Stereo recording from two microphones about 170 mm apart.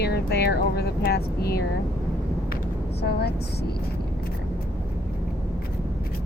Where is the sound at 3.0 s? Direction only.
70° left (ahead or behind).